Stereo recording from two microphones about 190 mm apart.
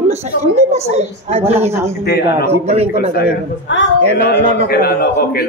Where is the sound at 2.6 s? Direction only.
35° right (ahead or behind).